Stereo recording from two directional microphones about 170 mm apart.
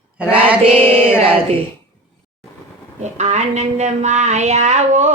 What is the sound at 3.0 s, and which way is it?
Speech, 40° right (ahead or behind).